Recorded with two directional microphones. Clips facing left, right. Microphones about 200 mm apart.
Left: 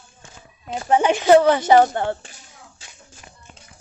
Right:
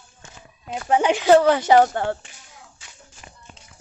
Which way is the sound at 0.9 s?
15° right (ahead or behind).